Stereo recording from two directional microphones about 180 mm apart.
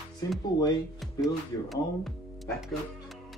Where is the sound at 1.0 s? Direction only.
Centre (ahead or behind).